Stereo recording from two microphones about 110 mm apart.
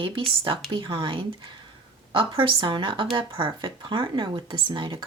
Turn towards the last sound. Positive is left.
turn(degrees=-50)  # may be behind; listen again after turning